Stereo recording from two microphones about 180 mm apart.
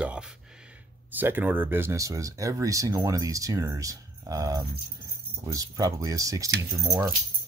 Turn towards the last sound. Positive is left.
turn(degrees=-20)  # may be behind; listen again after turning